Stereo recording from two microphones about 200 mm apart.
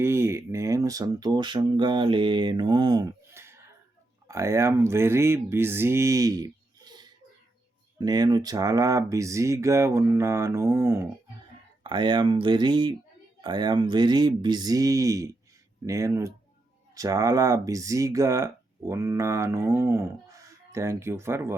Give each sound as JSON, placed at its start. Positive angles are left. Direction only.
{"t": 0.0, "sound": "speech", "side_deg": -15}
{"t": 11.8, "sound": "speech", "side_deg": -25}